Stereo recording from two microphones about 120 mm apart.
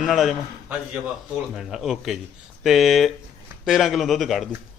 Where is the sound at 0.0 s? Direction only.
Centre (ahead or behind).